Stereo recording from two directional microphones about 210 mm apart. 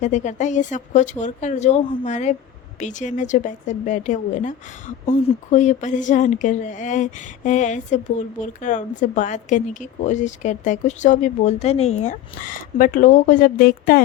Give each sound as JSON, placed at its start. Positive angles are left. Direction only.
{"t": 0.0, "sound": "speech", "side_deg": 35}